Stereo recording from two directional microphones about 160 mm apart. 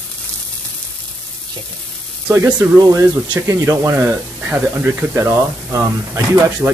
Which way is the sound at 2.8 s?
25° right (ahead or behind).